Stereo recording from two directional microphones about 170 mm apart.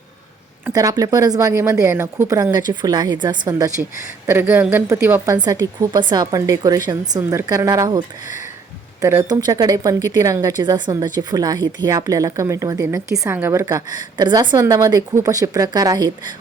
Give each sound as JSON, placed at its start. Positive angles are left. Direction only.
{"t": 0.6, "sound": "speech", "side_deg": -20}
{"t": 4.3, "sound": "speech", "side_deg": -10}